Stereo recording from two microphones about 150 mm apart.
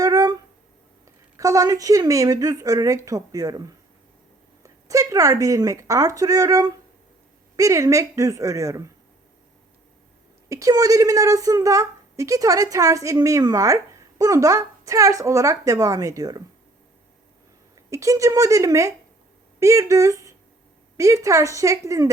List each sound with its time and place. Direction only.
0.0 s a sound: 25° right (ahead or behind)
1.0 s a woman's voice: 20° right (ahead or behind)
10.5 s a woman's voice: 20° right (ahead or behind)
17.9 s a woman's voice: 20° right (ahead or behind)